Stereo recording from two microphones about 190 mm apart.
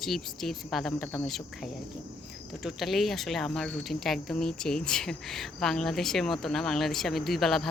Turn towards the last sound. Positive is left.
turn(degrees=0)  # may be behind; listen again after turning